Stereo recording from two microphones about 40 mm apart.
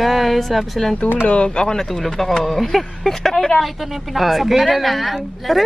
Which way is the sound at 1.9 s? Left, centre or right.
Centre.